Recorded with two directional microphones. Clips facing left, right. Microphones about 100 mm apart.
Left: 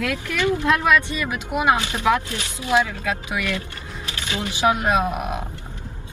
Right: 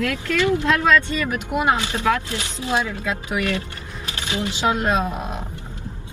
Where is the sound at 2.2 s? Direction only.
25° right (ahead or behind).